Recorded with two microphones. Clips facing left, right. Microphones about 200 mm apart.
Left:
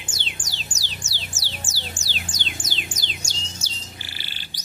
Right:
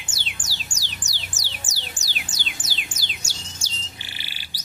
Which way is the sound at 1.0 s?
15° right (ahead or behind).